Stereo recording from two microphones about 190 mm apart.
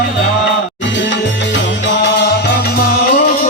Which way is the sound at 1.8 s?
65° left (ahead or behind).